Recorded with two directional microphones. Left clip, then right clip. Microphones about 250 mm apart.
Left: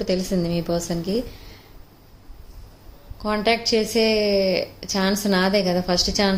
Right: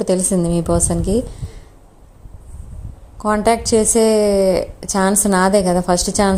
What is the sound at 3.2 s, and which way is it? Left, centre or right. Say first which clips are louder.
A woman's voice: right 5 dB; right.